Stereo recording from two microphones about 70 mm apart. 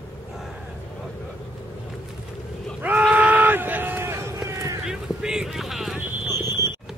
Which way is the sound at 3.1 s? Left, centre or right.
Right.